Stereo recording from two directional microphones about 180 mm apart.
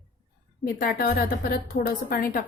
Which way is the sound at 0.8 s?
55° left (ahead or behind).